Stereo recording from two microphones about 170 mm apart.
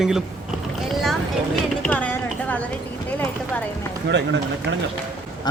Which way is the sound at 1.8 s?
10° left (ahead or behind).